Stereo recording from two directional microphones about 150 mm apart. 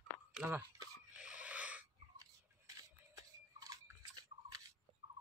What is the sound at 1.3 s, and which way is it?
Wheeze, 10° right (ahead or behind).